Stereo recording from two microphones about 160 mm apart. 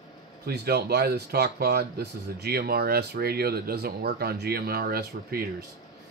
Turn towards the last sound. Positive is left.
turn(degrees=-70)  # may be behind; listen again after turning